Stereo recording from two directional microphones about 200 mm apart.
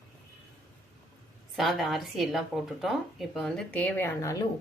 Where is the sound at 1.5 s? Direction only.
Centre (ahead or behind); by 4.4 s 15° left (ahead or behind).